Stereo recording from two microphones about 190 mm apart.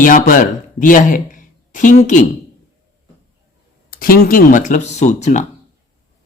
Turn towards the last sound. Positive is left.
turn(degrees=40)  # may be behind; listen again after turning